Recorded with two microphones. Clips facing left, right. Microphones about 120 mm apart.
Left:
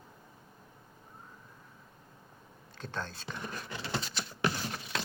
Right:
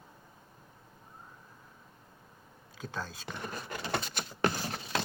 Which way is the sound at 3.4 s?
50° right (ahead or behind).